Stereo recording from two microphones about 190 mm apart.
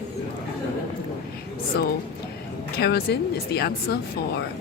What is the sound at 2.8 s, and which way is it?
Speech, 60° left (ahead or behind).